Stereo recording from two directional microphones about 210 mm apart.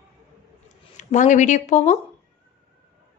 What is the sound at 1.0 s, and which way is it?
Speech, 35° left (ahead or behind).